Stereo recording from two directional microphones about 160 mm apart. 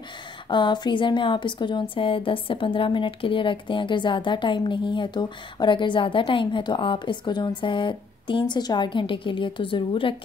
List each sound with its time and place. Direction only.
0.5 s speech: 30° left (ahead or behind)